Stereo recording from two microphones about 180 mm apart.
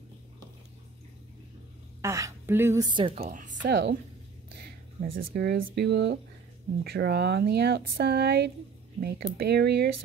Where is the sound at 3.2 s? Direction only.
45° right (ahead or behind).